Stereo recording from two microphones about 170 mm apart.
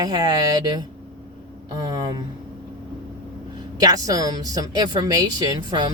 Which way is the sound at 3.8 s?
20° right (ahead or behind).